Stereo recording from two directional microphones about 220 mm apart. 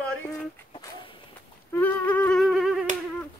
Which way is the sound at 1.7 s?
10° left (ahead or behind).